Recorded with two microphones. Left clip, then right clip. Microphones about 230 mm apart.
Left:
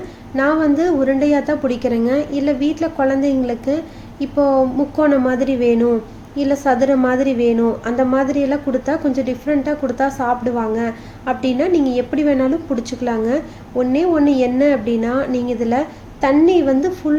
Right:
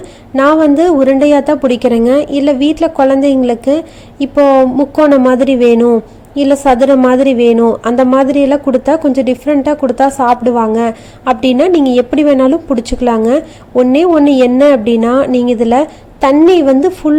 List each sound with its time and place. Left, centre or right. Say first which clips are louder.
0.3 s a woman's voice: right 8 dB; right